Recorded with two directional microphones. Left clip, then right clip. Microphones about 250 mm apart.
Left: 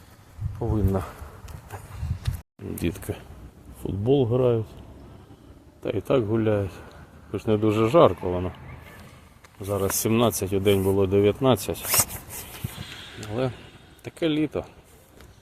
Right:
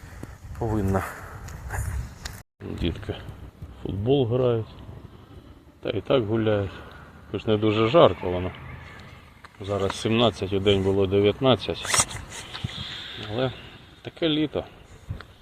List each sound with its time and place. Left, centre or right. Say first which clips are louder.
0.6 s speech: right 1 dB; centre
3.1 s speech: even; centre
5.8 s speech: even; centre
9.6 s speech: even; centre
14.0 s speech: even; centre